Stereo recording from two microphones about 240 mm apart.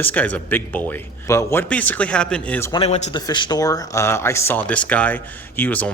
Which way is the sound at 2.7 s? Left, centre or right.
Left.